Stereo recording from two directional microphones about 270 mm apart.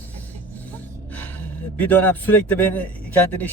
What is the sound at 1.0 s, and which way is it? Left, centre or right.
Speech, centre.